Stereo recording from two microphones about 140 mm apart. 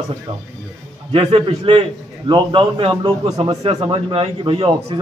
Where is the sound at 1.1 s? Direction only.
45° right (ahead or behind).